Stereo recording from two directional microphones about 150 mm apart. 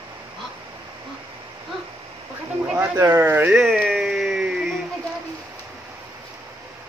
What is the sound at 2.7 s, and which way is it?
Speech, 15° right (ahead or behind).